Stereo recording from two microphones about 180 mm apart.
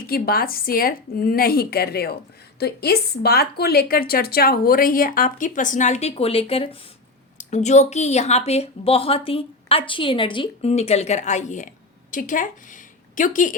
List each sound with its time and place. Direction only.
0.1 s a woman's voice: 55° left (ahead or behind)